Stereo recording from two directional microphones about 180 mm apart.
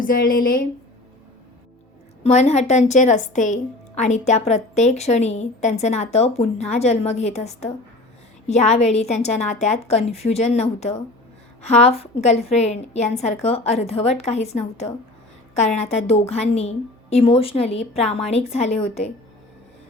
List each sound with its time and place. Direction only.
0.0 s a woman's voice: 50° left (ahead or behind)
2.2 s a woman's voice: 40° left (ahead or behind)